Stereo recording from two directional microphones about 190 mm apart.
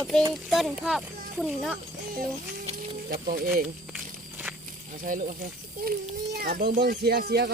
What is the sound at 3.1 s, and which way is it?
Speech, 50° right (ahead or behind).